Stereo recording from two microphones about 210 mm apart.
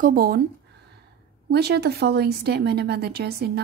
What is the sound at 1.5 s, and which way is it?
A woman's voice, 50° right (ahead or behind).